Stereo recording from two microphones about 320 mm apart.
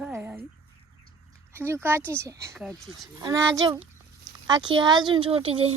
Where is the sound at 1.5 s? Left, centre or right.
Centre.